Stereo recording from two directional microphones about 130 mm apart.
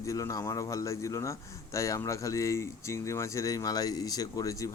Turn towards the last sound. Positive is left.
turn(degrees=25)  # may be behind; listen again after turning